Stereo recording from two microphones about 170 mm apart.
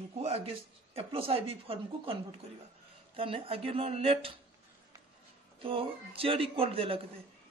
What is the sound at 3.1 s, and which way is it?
A man's voice, 30° right (ahead or behind).